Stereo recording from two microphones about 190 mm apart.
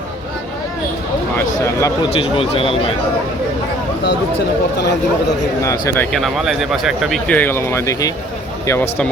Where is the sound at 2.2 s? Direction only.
30° left (ahead or behind).